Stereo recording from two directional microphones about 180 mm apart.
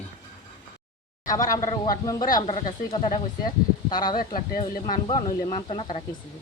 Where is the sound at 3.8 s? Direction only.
25° left (ahead or behind).